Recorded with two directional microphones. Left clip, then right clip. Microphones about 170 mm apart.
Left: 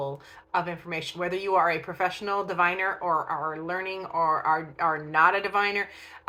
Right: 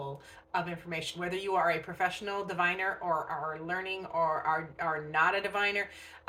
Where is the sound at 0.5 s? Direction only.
15° right (ahead or behind).